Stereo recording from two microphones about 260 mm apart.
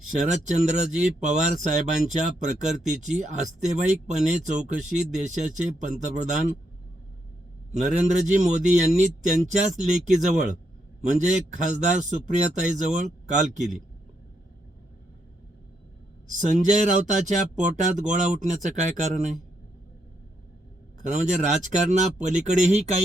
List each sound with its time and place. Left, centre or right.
0.3 s speech: right
7.8 s speech: right
16.4 s speech: right
21.0 s speech: right